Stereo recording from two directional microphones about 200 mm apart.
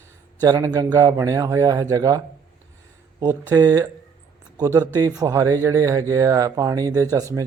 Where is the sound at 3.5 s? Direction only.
20° right (ahead or behind).